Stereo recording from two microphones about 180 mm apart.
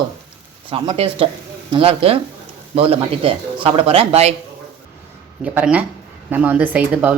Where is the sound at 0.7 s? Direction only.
30° right (ahead or behind).